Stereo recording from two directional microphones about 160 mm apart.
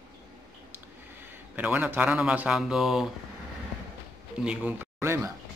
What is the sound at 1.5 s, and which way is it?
Speech, 10° right (ahead or behind).